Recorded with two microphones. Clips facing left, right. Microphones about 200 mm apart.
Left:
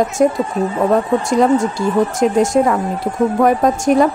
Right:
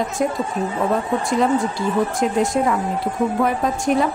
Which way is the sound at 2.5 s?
50° left (ahead or behind).